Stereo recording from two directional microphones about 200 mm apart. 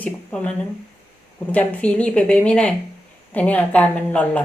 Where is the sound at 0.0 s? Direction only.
5° left (ahead or behind).